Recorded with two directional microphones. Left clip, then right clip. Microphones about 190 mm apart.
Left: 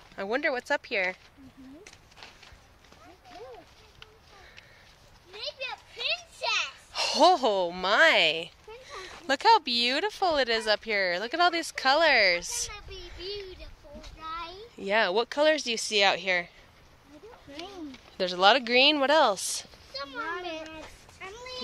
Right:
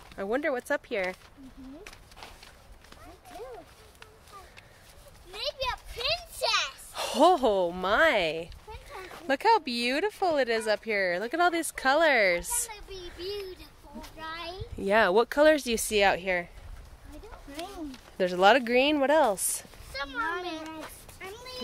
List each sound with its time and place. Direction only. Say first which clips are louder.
0.1 s speech: left 1 dB; 5° right (ahead or behind)
5.7 s a sound: left 1 dB; 15° right (ahead or behind)
9.1 s speech: left 2 dB; 5° right (ahead or behind); by 12.6 s 30° right (ahead or behind)
14.4 s speech: right 3 dB; 35° right (ahead or behind)
16.0 s speech: left 1 dB; 20° right (ahead or behind)
18.1 s speech: right 1 dB; 30° right (ahead or behind)
19.4 s a sound: left 3 dB; 25° right (ahead or behind)
20.2 s children playing: right 1 dB; 35° right (ahead or behind)